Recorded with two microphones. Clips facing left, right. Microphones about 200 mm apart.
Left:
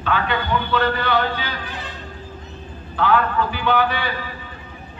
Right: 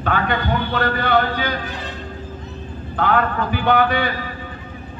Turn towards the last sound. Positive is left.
turn(degrees=-50)  # may be behind; listen again after turning